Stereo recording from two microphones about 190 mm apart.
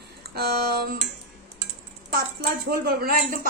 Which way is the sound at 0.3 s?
55° right (ahead or behind).